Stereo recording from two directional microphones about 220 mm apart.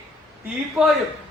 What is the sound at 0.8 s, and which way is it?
Speech, 5° right (ahead or behind).